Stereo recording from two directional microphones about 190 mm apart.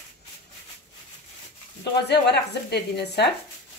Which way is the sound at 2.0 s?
60° left (ahead or behind).